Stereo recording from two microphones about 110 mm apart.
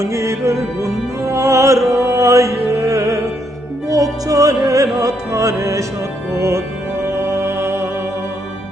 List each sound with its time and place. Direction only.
0.0 s music: 25° right (ahead or behind)
7.1 s music: 25° right (ahead or behind)